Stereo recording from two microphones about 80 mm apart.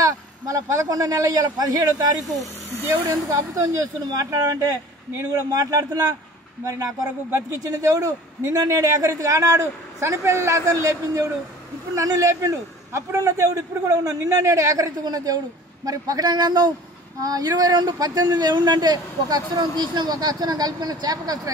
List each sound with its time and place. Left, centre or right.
0.0 s a man's voice: right
2.9 s a man's voice: right